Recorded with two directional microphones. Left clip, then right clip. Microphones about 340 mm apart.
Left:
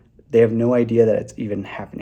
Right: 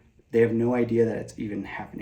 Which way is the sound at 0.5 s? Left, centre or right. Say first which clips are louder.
Left 7 dB; left.